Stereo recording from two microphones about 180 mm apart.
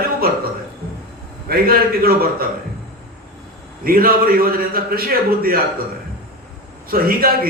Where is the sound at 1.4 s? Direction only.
55° right (ahead or behind).